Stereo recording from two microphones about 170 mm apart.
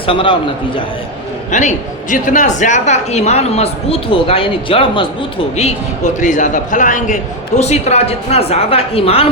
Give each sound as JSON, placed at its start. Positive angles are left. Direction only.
{"t": 0.0, "sound": "a man's voice", "side_deg": 30}
{"t": 1.5, "sound": "a man's voice", "side_deg": 45}
{"t": 6.1, "sound": "a man's voice", "side_deg": 45}